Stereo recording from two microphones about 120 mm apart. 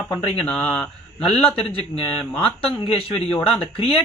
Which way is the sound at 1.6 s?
50° left (ahead or behind).